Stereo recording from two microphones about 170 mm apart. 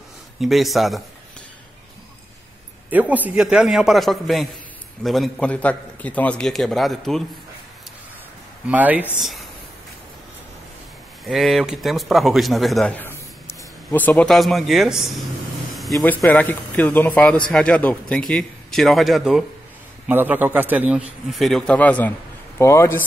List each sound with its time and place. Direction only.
0.4 s a man's voice: centre (ahead or behind)
2.9 s a man's voice: 10° right (ahead or behind)
8.6 s a man's voice: 10° right (ahead or behind)
11.2 s a man's voice: centre (ahead or behind)